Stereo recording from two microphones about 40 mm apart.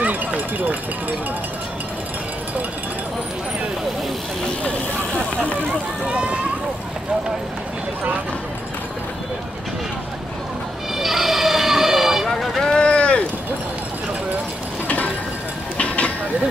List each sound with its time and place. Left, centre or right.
0.0 s run: right
4.6 s speech: left
6.0 s speech: right
11.0 s vehicle: centre
12.3 s vehicle: centre
12.7 s a sound: left
14.9 s a sound: left